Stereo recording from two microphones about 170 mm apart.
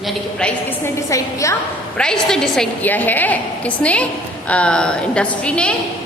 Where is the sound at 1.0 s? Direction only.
20° left (ahead or behind).